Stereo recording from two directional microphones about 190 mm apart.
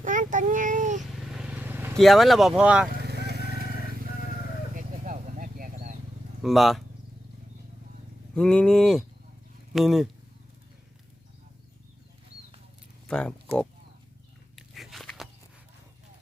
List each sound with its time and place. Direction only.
0.0 s child singing: 45° right (ahead or behind)
1.2 s vehicle: 5° right (ahead or behind)
2.0 s speech: centre (ahead or behind)
3.0 s vehicle: 60° right (ahead or behind)
4.7 s bee: 40° right (ahead or behind)
6.4 s speech: centre (ahead or behind)
8.4 s speech: 5° left (ahead or behind)
13.1 s speech: 5° left (ahead or behind)
14.5 s biting: centre (ahead or behind)